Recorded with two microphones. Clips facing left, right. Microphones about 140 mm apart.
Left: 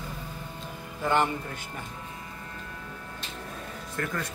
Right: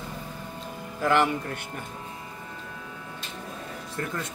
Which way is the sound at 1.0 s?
90° right.